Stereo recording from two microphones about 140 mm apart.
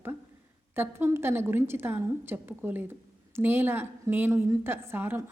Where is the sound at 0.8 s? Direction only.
15° right (ahead or behind).